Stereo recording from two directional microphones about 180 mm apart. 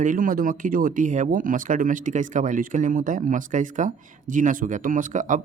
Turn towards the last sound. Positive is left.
turn(degrees=-45)  # may be behind; listen again after turning